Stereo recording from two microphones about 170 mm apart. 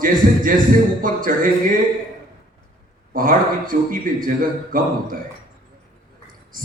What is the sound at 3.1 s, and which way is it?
A man's voice, 55° right (ahead or behind).